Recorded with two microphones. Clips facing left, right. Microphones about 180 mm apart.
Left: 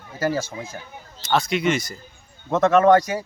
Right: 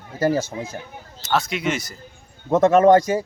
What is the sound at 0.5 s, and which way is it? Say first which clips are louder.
Speech: right 4 dB; 60° right (ahead or behind).